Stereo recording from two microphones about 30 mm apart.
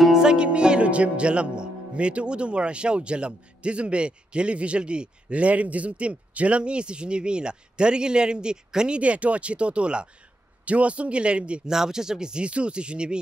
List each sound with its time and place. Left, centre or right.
0.1 s music: right
0.5 s speech: right
5.3 s speech: right
9.0 s speech: right
11.7 s speech: centre
12.4 s speech: right